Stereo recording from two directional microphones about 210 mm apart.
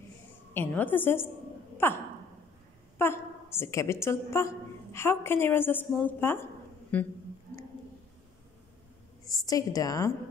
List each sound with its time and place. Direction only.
0.6 s a woman's voice: 10° left (ahead or behind)
3.0 s a woman's voice: 10° left (ahead or behind)
9.2 s a woman's voice: 15° left (ahead or behind)